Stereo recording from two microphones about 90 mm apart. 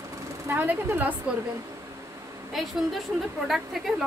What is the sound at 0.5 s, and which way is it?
Speech, 20° right (ahead or behind).